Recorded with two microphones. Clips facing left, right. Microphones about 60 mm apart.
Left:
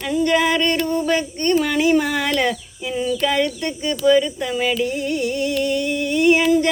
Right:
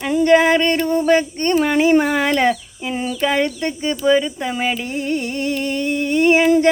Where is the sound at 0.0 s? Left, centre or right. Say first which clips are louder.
Right 5 dB; right.